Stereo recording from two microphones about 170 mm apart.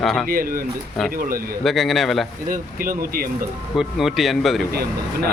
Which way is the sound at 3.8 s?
Centre (ahead or behind).